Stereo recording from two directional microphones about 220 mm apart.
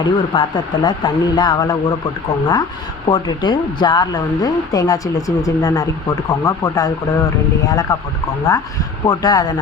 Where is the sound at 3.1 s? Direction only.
20° left (ahead or behind).